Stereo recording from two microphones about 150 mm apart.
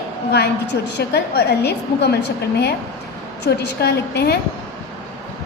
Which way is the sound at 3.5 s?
90° left.